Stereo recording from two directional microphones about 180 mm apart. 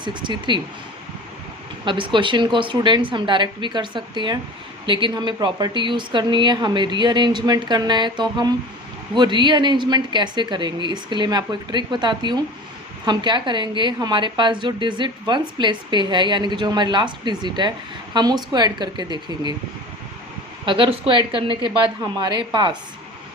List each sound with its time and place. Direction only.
0.0 s a woman's voice: 25° right (ahead or behind)
1.8 s a woman's voice: 25° right (ahead or behind)
20.7 s a woman's voice: 30° right (ahead or behind)